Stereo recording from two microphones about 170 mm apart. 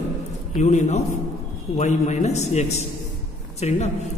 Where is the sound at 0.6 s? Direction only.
45° left (ahead or behind).